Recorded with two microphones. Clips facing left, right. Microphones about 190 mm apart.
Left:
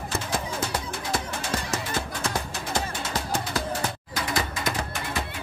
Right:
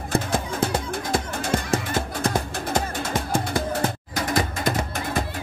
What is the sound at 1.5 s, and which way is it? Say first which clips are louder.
Music: right 6 dB; 25° right (ahead or behind).